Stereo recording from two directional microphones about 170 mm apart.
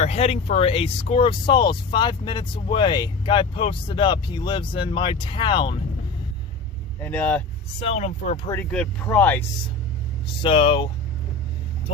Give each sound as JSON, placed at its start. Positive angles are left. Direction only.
{"t": 0.0, "sound": "speech", "side_deg": 40}
{"t": 7.0, "sound": "speech", "side_deg": 5}
{"t": 7.9, "sound": "speech", "side_deg": 45}
{"t": 8.4, "sound": "speech", "side_deg": 10}
{"t": 10.4, "sound": "speech", "side_deg": 30}